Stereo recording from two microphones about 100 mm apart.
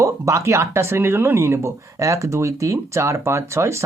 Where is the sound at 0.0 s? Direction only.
30° right (ahead or behind).